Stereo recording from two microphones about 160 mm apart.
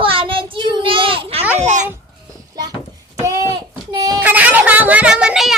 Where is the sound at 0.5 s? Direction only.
30° right (ahead or behind).